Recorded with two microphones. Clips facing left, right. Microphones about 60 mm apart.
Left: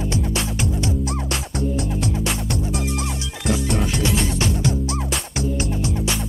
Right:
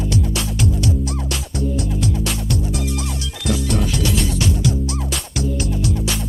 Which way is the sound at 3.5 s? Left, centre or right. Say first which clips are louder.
Right 2 dB; centre.